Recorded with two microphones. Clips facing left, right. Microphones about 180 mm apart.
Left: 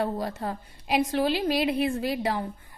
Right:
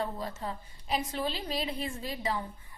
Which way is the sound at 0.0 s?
70° left (ahead or behind).